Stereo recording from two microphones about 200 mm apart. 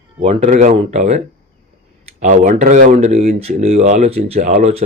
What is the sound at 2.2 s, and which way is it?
Speech, 40° right (ahead or behind).